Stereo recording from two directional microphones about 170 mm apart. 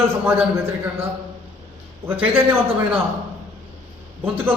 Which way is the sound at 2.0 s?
10° right (ahead or behind).